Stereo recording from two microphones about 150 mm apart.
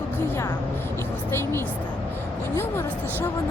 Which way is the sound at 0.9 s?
15° left (ahead or behind).